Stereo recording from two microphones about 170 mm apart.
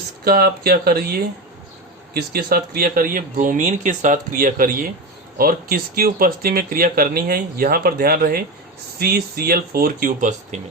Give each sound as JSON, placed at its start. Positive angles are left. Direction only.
{"t": 0.3, "sound": "speech", "side_deg": -65}